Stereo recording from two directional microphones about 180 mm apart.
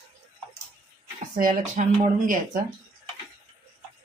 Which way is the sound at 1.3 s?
50° right (ahead or behind).